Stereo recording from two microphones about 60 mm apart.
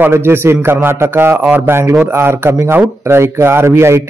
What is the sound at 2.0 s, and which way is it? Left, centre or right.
A man's voice, right.